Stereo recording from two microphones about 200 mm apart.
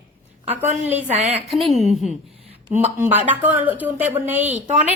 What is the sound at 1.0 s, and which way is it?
Speech, 30° right (ahead or behind).